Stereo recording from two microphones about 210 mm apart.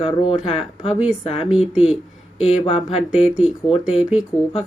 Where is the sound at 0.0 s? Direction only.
25° left (ahead or behind).